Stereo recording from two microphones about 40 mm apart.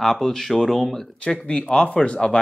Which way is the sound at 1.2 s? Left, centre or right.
Left.